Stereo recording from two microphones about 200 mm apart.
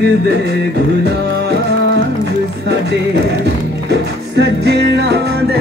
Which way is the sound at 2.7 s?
55° right (ahead or behind).